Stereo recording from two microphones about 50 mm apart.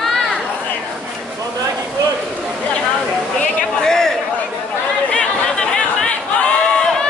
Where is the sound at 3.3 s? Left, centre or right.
Centre.